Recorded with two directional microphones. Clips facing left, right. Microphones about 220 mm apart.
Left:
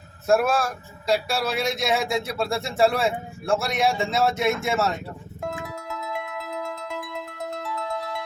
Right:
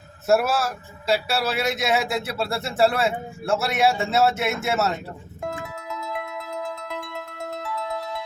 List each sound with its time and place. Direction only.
0.3 s a man's voice: 5° right (ahead or behind)
5.5 s music: centre (ahead or behind)